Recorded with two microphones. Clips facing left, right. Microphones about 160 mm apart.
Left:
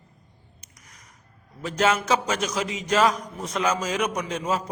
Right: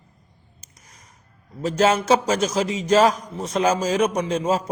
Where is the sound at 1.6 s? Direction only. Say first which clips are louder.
Right 5 dB; 30° right (ahead or behind).